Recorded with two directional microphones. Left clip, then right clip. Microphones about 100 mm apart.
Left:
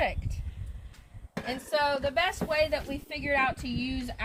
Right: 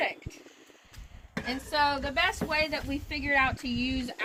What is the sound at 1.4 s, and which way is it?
A woman's voice, 45° left (ahead or behind).